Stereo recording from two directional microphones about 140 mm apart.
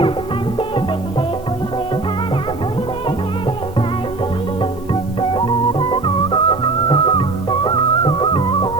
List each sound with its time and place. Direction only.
5.3 s music: 35° left (ahead or behind)